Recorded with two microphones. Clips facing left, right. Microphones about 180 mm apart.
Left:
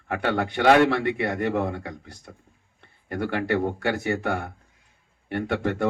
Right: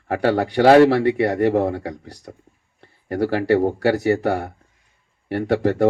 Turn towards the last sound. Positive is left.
turn(degrees=-35)  # may be behind; listen again after turning